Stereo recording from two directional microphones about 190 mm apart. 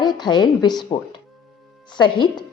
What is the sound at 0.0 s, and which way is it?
A woman's voice, 20° left (ahead or behind).